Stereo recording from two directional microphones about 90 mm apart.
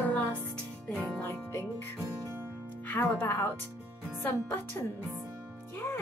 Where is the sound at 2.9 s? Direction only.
25° left (ahead or behind).